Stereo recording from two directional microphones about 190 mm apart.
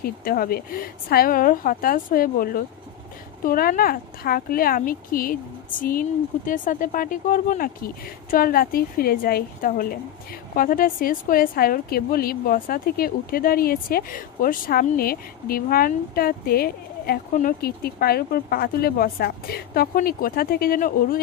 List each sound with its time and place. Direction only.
0.0 s speech: 50° left (ahead or behind)